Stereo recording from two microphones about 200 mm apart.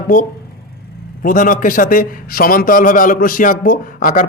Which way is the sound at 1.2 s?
40° left (ahead or behind).